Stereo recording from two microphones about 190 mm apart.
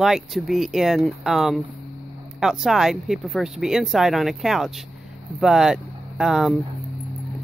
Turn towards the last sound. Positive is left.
turn(degrees=-5)  # may be behind; listen again after turning